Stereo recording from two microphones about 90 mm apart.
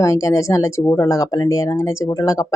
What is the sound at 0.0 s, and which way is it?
Speech, 35° left (ahead or behind).